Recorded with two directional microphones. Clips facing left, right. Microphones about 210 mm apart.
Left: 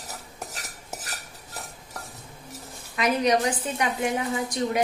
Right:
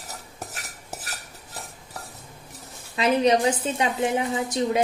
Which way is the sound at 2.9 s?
25° right (ahead or behind).